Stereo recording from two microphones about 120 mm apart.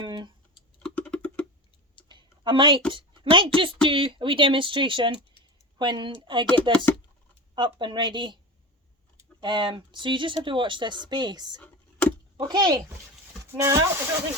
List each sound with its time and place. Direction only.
0.0 s typing: 40° right (ahead or behind)
0.8 s a sound: 10° left (ahead or behind)
2.0 s a sound: 40° right (ahead or behind)
2.9 s a woman's voice: 45° right (ahead or behind)
6.5 s speech: 10° left (ahead or behind)
7.5 s speech: 40° right (ahead or behind)
9.4 s speech: 40° right (ahead or behind)
11.6 s a sound: 10° left (ahead or behind)
12.4 s speech: 35° right (ahead or behind)
13.4 s speech: 25° right (ahead or behind)